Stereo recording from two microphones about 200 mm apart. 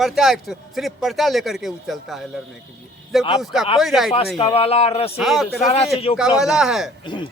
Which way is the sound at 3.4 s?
Centre (ahead or behind).